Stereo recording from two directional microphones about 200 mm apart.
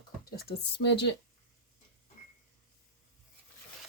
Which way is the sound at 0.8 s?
60° left (ahead or behind).